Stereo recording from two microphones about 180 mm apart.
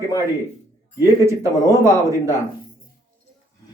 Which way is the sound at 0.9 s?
15° right (ahead or behind).